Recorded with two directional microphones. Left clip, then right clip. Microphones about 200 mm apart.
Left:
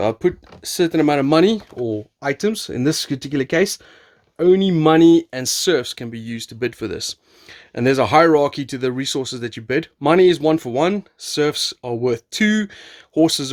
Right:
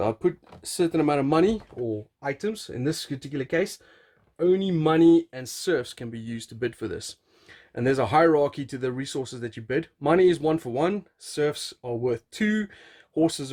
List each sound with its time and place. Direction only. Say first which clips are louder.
0.0 s speech: left 6 dB; 25° left (ahead or behind)
2.2 s speech: left 9 dB; 45° left (ahead or behind)